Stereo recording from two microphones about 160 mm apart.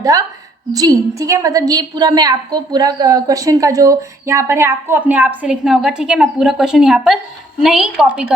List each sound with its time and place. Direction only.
0.0 s a woman's voice: 20° right (ahead or behind); by 8.3 s 5° right (ahead or behind)